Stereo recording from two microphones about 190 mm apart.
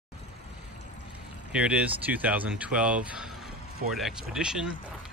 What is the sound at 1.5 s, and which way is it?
Speech, 5° right (ahead or behind).